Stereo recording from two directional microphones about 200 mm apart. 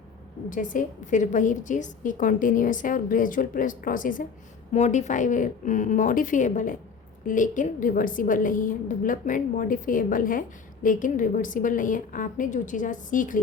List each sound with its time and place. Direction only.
0.5 s a woman's voice: 40° left (ahead or behind)